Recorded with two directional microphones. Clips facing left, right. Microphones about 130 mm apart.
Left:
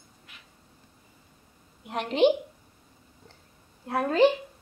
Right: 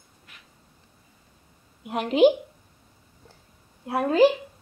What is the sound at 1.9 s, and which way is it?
Speech, 5° right (ahead or behind).